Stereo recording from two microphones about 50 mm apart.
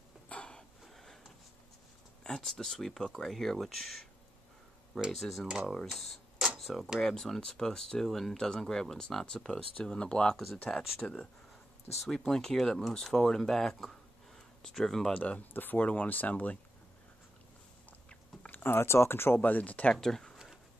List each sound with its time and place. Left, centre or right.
0.3 s a sound: centre
2.2 s speech: centre
5.1 s speech: centre
5.9 s a sound: centre
6.6 s speech: centre
7.0 s speech: centre
10.3 s speech: centre
11.0 s speech: centre
12.3 s speech: centre
15.1 s speech: left
18.5 s speech: left
19.4 s speech: left
19.9 s speech: centre